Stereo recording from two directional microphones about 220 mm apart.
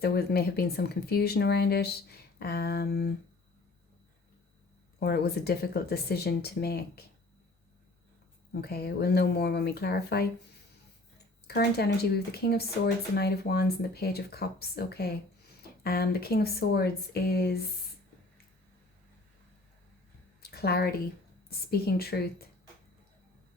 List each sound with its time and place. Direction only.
0.0 s speech: 45° left (ahead or behind)
4.9 s speech: 45° left (ahead or behind)
8.6 s speech: 45° left (ahead or behind)
20.4 s a sound: 45° left (ahead or behind)
21.5 s speech: 45° left (ahead or behind)